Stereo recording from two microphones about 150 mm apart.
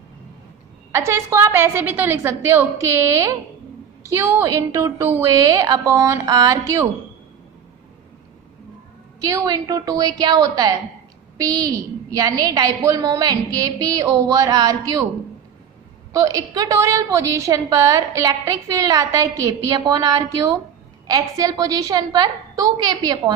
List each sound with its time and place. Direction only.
0.9 s a woman's voice: 20° right (ahead or behind)
4.0 s a woman's voice: 15° right (ahead or behind)
9.3 s a woman's voice: 25° right (ahead or behind)
16.1 s a woman's voice: 20° right (ahead or behind)